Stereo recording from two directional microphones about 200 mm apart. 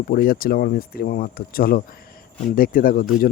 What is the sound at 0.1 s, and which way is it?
Speech, 45° left (ahead or behind).